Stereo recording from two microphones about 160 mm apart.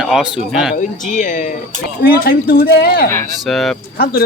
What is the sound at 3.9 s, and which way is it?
Speech, 70° left (ahead or behind).